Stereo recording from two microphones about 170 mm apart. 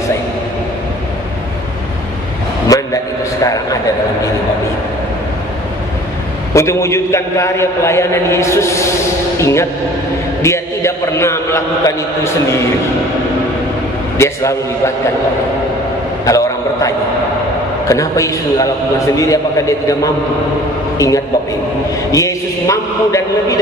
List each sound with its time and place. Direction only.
2.7 s a sound: 20° left (ahead or behind)
6.5 s a man's voice: 15° left (ahead or behind)
14.1 s a man's voice: 15° left (ahead or behind)
16.3 s a sound: 20° left (ahead or behind)
17.8 s a man's voice: 20° left (ahead or behind)
22.1 s a man's voice: 20° left (ahead or behind)